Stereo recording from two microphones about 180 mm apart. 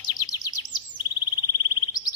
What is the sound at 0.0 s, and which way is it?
Chirp, 20° left (ahead or behind).